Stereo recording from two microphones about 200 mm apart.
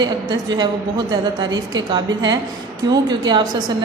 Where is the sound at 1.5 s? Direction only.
20° right (ahead or behind).